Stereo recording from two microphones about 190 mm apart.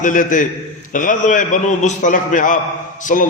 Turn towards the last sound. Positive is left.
turn(degrees=40)  # may be behind; listen again after turning